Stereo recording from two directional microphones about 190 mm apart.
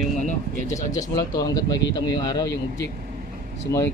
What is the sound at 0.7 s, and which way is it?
Speech, 20° left (ahead or behind).